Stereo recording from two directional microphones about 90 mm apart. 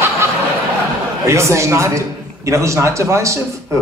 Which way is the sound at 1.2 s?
30° right (ahead or behind).